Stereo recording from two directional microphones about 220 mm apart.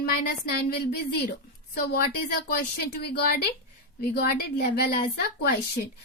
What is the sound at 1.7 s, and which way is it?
A woman's voice, 45° left (ahead or behind).